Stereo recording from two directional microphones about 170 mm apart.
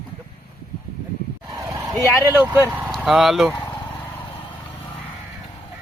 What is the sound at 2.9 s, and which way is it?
Speech, centre (ahead or behind).